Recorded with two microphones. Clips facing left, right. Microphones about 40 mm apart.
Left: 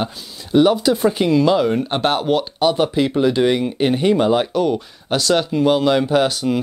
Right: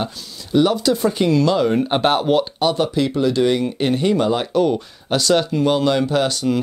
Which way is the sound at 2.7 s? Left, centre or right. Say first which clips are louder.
Left 2 dB; centre.